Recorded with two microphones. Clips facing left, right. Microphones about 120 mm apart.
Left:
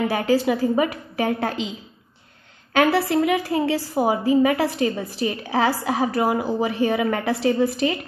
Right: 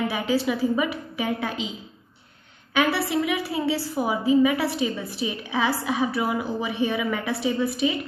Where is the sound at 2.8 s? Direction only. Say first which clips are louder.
Left 5 dB; 50° left (ahead or behind).